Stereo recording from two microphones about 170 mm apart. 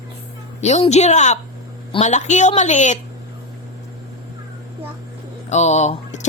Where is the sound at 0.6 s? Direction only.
40° left (ahead or behind).